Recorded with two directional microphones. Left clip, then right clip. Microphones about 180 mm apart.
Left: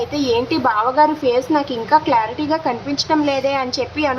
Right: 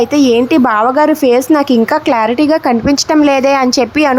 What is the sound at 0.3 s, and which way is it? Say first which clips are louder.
A woman's voice: right 7 dB; 45° right (ahead or behind).